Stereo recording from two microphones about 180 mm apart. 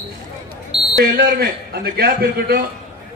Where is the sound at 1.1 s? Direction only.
60° right (ahead or behind).